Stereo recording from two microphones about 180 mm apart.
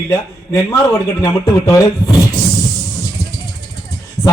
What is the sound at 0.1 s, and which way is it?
A man's voice, 20° left (ahead or behind).